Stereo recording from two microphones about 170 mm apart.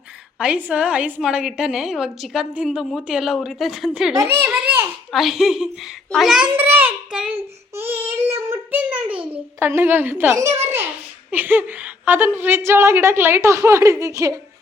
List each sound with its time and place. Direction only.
0.3 s a woman's voice: 5° right (ahead or behind)
4.1 s a child's voice: 20° right (ahead or behind)
4.4 s a child's voice: 5° right (ahead or behind)
5.1 s a sound: centre (ahead or behind); by 10.6 s 20° right (ahead or behind)
11.3 s a woman's voice: 10° right (ahead or behind)